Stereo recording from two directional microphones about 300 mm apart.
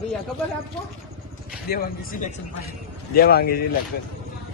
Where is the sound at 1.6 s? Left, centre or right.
Left.